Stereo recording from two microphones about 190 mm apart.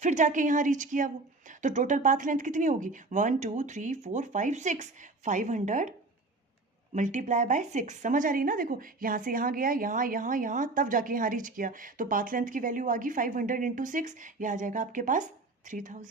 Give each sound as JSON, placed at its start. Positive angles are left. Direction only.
{"t": 0.0, "sound": "a woman's voice", "side_deg": -40}
{"t": 6.9, "sound": "a woman's voice", "side_deg": -40}